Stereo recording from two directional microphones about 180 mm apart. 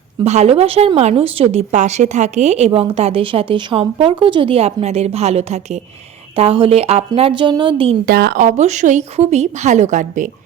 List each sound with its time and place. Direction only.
0.3 s a woman's voice: 35° right (ahead or behind)
8.0 s a woman's voice: 60° right (ahead or behind); by 10.2 s 45° right (ahead or behind)